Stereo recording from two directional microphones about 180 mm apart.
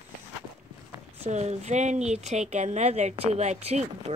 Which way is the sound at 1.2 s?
35° right (ahead or behind).